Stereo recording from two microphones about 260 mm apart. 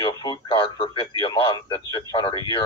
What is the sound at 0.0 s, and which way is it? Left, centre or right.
Speech, centre.